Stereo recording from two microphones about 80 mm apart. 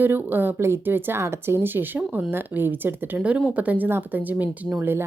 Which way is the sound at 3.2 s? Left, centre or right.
Centre.